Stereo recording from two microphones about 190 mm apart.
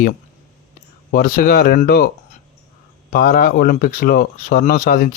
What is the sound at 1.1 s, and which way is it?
Speech, 45° left (ahead or behind).